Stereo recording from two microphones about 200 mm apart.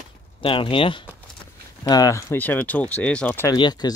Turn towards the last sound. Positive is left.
turn(degrees=20)  # may be behind; listen again after turning